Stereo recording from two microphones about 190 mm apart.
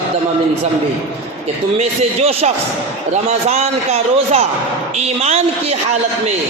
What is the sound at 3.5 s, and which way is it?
A man's voice, 35° right (ahead or behind).